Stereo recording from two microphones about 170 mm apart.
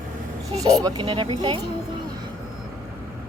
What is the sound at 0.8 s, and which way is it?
Speech, 25° right (ahead or behind).